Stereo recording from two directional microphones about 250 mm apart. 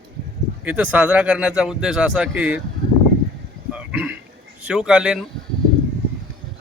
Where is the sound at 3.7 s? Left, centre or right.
Centre.